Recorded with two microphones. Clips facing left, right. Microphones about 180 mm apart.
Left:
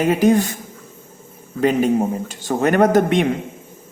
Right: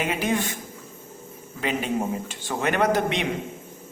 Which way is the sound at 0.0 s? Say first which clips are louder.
Left 10 dB; 40° left (ahead or behind).